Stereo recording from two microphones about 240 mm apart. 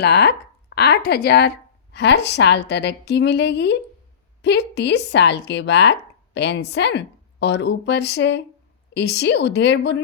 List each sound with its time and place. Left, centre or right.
0.0 s speech: left